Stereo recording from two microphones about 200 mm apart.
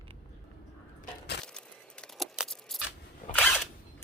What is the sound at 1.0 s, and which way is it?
Crushing, 55° left (ahead or behind).